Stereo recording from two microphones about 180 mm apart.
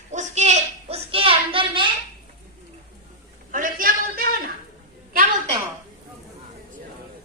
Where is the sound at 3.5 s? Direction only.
50° right (ahead or behind).